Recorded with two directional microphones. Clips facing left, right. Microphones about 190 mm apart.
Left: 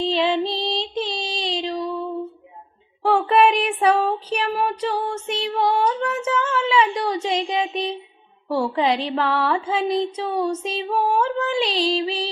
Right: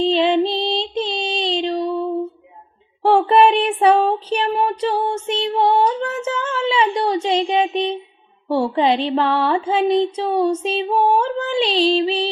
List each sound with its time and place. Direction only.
0.0 s child singing: 25° right (ahead or behind)